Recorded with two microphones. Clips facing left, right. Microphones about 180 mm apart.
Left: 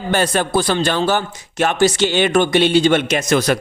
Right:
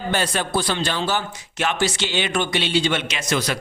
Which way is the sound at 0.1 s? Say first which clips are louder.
Left 6 dB; 50° left (ahead or behind).